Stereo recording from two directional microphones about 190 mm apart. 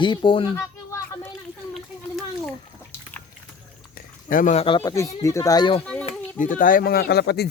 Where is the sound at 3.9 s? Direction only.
45° left (ahead or behind); by 4.9 s 30° left (ahead or behind).